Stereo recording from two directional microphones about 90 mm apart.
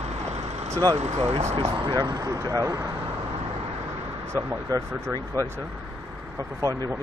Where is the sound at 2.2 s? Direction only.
40° right (ahead or behind).